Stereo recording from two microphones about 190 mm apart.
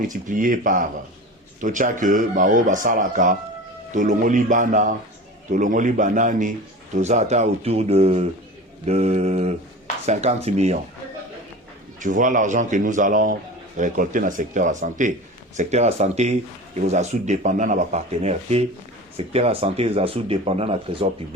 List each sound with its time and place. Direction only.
0.0 s speech: 45° right (ahead or behind)
11.9 s speech: 45° right (ahead or behind)